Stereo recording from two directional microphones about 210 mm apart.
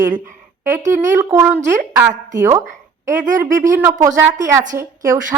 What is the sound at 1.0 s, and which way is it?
A woman's voice, 15° right (ahead or behind).